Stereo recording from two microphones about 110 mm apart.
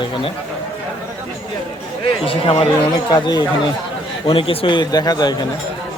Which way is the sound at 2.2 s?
55° left (ahead or behind).